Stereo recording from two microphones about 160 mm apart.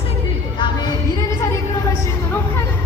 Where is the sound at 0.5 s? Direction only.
30° left (ahead or behind).